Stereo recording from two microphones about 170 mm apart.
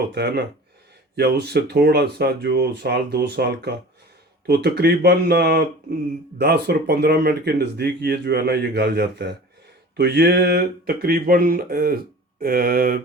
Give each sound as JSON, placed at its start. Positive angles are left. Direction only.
{"t": 0.1, "sound": "speech", "side_deg": -80}